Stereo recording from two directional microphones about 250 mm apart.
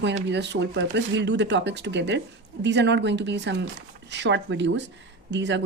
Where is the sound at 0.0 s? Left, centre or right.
Right.